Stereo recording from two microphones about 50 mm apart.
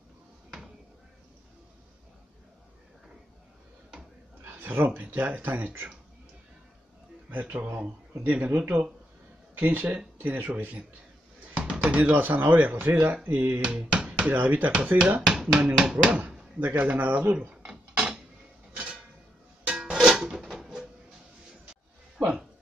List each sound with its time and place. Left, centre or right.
4.4 s speech: right
7.2 s speech: right
11.5 s a sound: centre
12.0 s speech: right
13.6 s speech: centre
14.3 s speech: right
15.2 s speech: centre
16.1 s speech: right
17.6 s mechanisms: right
19.6 s music: centre
20.1 s a sound: centre